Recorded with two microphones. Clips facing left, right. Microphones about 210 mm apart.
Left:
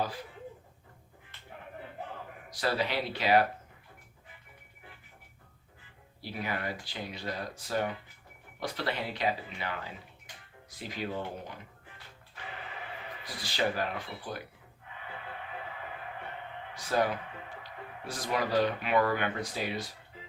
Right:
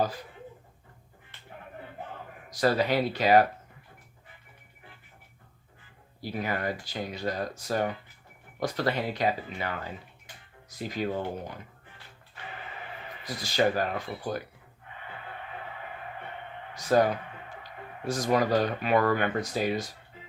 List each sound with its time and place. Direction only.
2.5 s speech: 45° right (ahead or behind)
6.2 s speech: 45° right (ahead or behind)
10.8 s speech: 45° right (ahead or behind)
13.2 s speech: 45° right (ahead or behind)
16.7 s speech: 45° right (ahead or behind)